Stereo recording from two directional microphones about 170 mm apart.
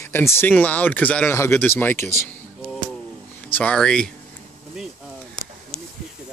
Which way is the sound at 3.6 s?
5° left (ahead or behind).